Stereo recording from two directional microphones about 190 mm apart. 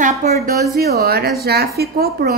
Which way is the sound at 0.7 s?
55° right (ahead or behind).